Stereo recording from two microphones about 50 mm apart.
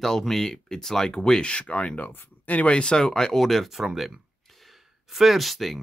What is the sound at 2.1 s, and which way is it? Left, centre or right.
Speech, left.